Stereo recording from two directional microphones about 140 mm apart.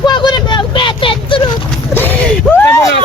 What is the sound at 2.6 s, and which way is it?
Speech, 20° left (ahead or behind).